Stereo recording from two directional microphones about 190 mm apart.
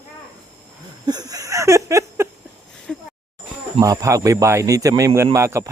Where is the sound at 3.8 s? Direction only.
15° right (ahead or behind).